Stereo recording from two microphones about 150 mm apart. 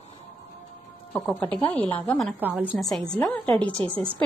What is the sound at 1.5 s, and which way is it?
Speech, 10° left (ahead or behind).